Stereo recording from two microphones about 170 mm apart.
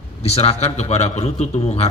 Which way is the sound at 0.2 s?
40° left (ahead or behind).